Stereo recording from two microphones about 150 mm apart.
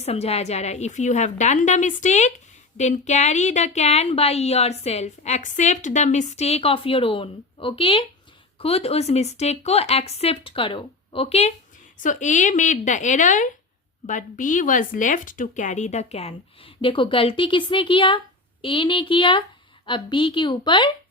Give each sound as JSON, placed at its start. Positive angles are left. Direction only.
{"t": 0.0, "sound": "a woman's voice", "side_deg": 45}
{"t": 12.0, "sound": "a woman's voice", "side_deg": 55}